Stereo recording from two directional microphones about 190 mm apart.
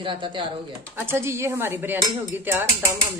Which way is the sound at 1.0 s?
15° right (ahead or behind).